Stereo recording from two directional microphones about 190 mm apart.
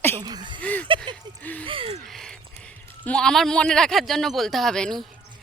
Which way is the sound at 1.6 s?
30° right (ahead or behind).